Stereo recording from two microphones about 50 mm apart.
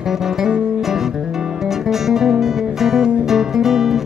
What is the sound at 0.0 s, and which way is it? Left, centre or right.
Music, centre.